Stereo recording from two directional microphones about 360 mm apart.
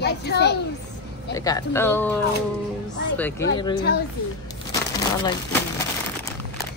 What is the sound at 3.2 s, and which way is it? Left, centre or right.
Speech, centre.